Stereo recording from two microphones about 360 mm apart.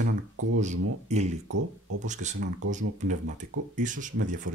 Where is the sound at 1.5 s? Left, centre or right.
Right.